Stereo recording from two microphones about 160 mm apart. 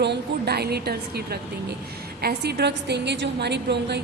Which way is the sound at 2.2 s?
90° right.